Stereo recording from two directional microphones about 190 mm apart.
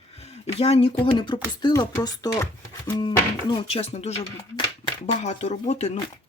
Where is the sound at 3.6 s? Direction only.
30° left (ahead or behind).